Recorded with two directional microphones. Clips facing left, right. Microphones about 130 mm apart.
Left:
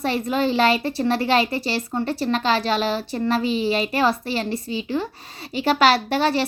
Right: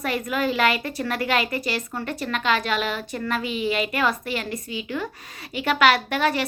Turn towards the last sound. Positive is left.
turn(degrees=30)  # may be behind; listen again after turning